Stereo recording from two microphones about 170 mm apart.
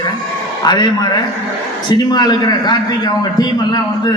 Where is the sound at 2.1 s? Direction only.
25° left (ahead or behind).